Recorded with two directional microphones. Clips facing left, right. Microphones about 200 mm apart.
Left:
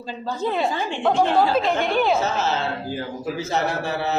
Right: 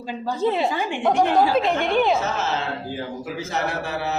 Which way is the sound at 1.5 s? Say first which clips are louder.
Right 1 dB; 5° left (ahead or behind).